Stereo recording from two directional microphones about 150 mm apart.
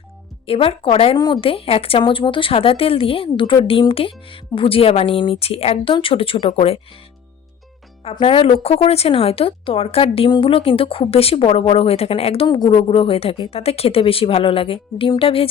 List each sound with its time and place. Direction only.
0.4 s a woman's voice: 40° left (ahead or behind)
8.0 s a woman's voice: 40° left (ahead or behind)